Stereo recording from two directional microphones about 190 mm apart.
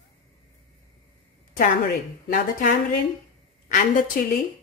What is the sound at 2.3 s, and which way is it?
Speech, 45° left (ahead or behind).